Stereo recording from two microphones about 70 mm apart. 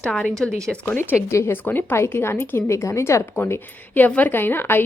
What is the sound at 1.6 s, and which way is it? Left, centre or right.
A woman's voice, left.